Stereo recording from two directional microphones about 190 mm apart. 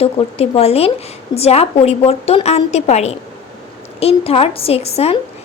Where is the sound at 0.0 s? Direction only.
30° left (ahead or behind).